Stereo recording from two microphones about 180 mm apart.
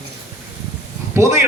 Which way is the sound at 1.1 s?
15° right (ahead or behind).